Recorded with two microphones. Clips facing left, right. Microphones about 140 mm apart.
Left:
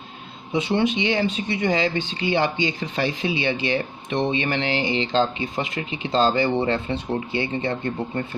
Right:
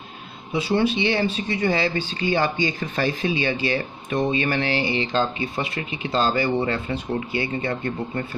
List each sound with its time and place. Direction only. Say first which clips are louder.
0.5 s speech: even; 20° left (ahead or behind)